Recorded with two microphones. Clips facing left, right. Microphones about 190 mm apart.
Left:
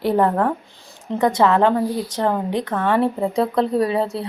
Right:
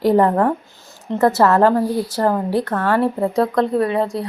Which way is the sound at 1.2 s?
5° right (ahead or behind).